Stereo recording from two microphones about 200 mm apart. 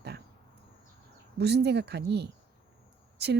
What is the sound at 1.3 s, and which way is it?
Speech, 55° right (ahead or behind).